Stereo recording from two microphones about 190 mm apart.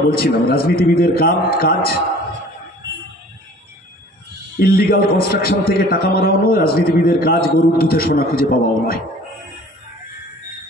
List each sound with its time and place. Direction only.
0.1 s a man's voice: 50° left (ahead or behind)
4.6 s a man's voice: 50° left (ahead or behind)